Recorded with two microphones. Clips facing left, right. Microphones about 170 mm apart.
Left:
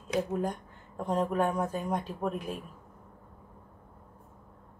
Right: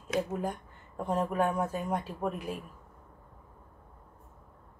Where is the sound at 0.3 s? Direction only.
5° right (ahead or behind).